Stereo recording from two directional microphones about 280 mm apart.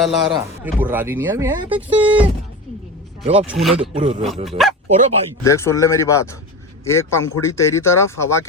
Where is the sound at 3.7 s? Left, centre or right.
Right.